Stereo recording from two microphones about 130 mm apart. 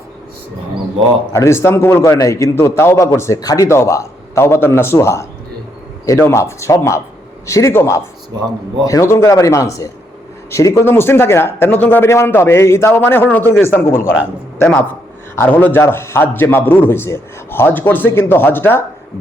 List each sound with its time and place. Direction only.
1.3 s a man's voice: 20° left (ahead or behind)